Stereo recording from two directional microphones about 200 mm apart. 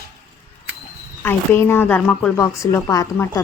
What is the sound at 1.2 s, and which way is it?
A woman's voice, 10° left (ahead or behind).